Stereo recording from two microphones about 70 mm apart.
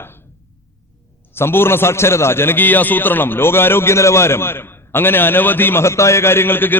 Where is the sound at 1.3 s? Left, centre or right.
Left.